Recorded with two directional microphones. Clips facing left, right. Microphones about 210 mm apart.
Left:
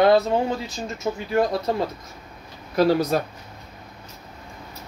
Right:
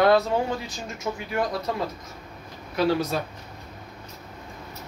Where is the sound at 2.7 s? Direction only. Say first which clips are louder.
Left 4 dB; 40° left (ahead or behind).